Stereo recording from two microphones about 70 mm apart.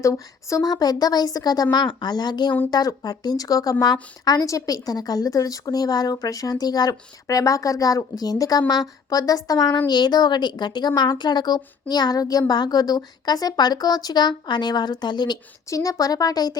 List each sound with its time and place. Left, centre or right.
0.0 s a woman's voice: left
0.7 s a woman's voice: left
2.6 s a woman's voice: left
15.7 s speech: left